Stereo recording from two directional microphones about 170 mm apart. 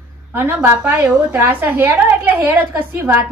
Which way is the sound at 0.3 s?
10° right (ahead or behind).